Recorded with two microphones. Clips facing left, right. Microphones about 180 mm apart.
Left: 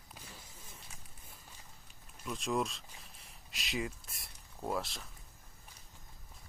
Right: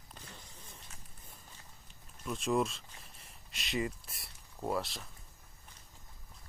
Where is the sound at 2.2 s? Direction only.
Centre (ahead or behind).